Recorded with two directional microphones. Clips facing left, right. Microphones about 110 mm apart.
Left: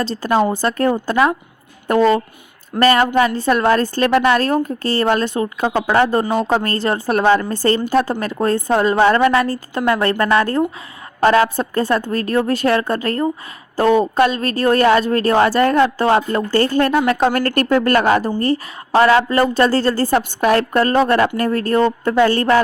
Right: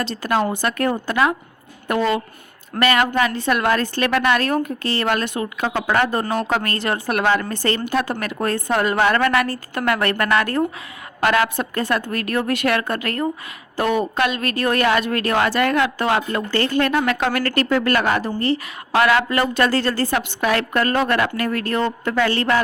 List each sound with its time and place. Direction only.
0.0 s a woman's voice: 35° left (ahead or behind)
1.9 s a woman's voice: 35° left (ahead or behind)
18.9 s a woman's voice: 30° left (ahead or behind)